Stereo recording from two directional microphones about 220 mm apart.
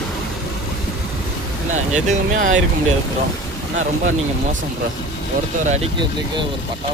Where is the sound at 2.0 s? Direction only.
35° right (ahead or behind).